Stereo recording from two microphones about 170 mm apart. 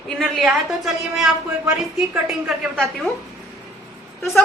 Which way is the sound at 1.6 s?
10° right (ahead or behind).